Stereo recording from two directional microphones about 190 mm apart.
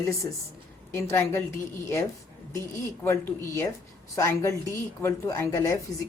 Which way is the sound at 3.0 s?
15° left (ahead or behind).